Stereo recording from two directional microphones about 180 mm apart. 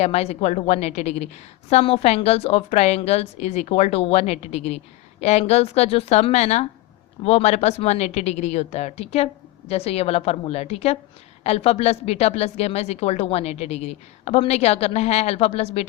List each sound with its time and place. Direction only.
0.0 s a woman's voice: 35° left (ahead or behind)